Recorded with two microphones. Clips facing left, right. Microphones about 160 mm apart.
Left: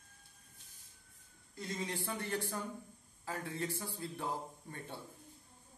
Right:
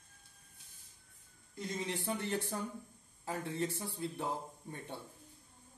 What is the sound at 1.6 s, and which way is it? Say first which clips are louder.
Speech: right 1 dB; 15° right (ahead or behind).